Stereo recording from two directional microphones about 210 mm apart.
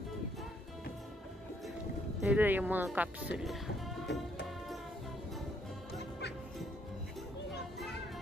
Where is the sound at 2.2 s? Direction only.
5° right (ahead or behind).